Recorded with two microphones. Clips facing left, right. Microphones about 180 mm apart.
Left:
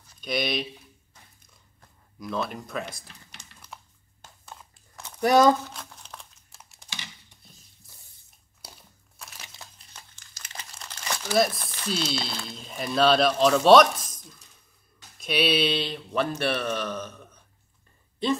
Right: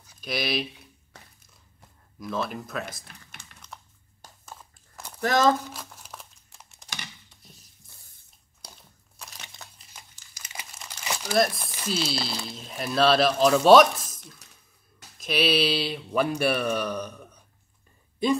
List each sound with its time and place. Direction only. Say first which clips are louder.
0.2 s speech: left 1 dB; centre (ahead or behind)
1.1 s crushing: right 8 dB; 75° right (ahead or behind)
1.5 s a sound: right 1 dB; centre (ahead or behind)
4.5 s biting: even; centre (ahead or behind)
5.2 s speech: left 4 dB; 10° left (ahead or behind)
5.7 s crumpling: right 1 dB; 5° right (ahead or behind)
8.6 s crumpling: even; centre (ahead or behind)
11.3 s speech: even; centre (ahead or behind)